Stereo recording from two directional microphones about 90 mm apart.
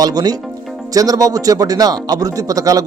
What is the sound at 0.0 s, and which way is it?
Speech, 45° right (ahead or behind).